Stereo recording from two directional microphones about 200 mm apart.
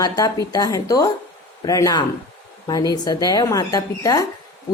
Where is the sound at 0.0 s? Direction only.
15° left (ahead or behind).